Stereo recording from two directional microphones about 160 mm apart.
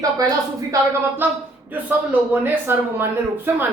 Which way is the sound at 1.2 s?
10° right (ahead or behind).